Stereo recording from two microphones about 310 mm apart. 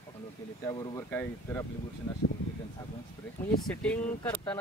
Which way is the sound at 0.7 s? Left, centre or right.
Centre.